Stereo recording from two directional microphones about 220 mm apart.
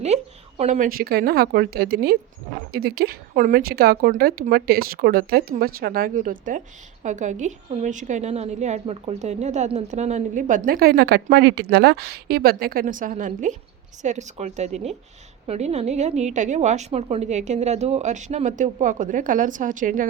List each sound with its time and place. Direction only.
0.0 s a woman's voice: 30° right (ahead or behind)